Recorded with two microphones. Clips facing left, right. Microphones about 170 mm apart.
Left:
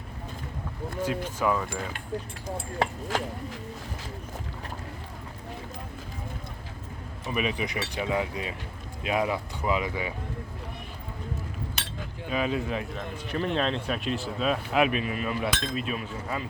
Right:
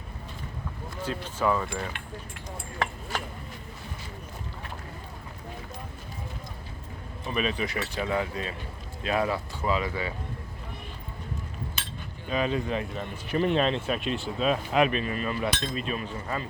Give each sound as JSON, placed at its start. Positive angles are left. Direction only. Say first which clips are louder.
{"t": 1.0, "sound": "speech", "louder": "even", "side_deg": 10}
{"t": 3.1, "sound": "speech", "louder": "left 5 dB", "side_deg": 90}
{"t": 7.3, "sound": "speech", "louder": "even", "side_deg": 15}
{"t": 11.8, "sound": "chink", "louder": "left 1 dB", "side_deg": 70}
{"t": 12.3, "sound": "speech", "louder": "right 1 dB", "side_deg": 5}
{"t": 13.0, "sound": "speech", "louder": "right 3 dB", "side_deg": -10}